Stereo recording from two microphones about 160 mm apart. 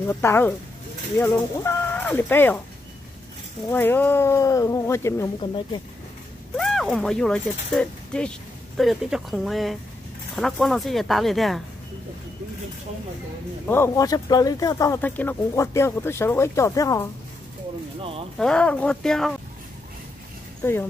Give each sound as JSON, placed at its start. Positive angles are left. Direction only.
{"t": 0.1, "sound": "speech", "side_deg": 15}
{"t": 3.7, "sound": "speech", "side_deg": 10}
{"t": 6.5, "sound": "speech", "side_deg": 5}
{"t": 13.7, "sound": "speech", "side_deg": 15}
{"t": 15.0, "sound": "speech", "side_deg": 10}
{"t": 18.4, "sound": "speech", "side_deg": 5}